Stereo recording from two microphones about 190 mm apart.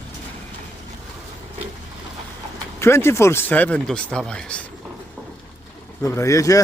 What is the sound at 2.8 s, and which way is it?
Speech, 15° left (ahead or behind).